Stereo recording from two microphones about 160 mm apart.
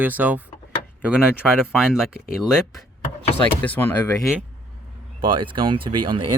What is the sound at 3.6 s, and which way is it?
Speech, 10° left (ahead or behind).